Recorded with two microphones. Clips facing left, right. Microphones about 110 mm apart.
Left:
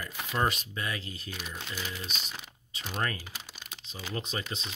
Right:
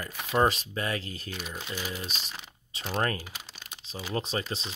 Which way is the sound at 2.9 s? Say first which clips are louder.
Right 4 dB; 40° right (ahead or behind).